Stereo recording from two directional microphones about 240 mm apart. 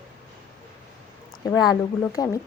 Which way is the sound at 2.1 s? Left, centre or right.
Centre.